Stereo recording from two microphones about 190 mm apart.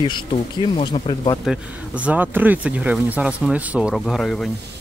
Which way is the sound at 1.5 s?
5° right (ahead or behind).